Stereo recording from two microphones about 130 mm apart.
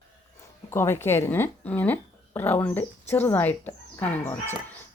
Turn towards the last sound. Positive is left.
turn(degrees=10)  # may be behind; listen again after turning